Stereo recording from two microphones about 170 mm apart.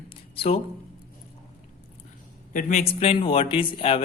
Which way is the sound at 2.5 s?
50° left (ahead or behind).